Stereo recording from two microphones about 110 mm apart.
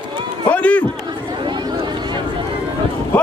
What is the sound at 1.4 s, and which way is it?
Chatter, 45° right (ahead or behind).